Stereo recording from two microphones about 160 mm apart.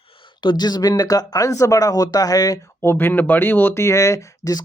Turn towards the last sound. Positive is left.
turn(degrees=20)  # may be behind; listen again after turning